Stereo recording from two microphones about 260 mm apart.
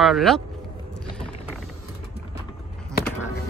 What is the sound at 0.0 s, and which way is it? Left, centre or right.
Speech, centre.